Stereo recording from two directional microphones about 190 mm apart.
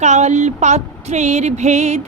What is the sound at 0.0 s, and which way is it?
Speech, 35° right (ahead or behind).